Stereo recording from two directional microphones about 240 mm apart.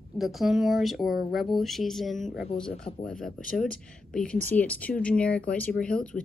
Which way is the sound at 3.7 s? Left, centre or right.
Left.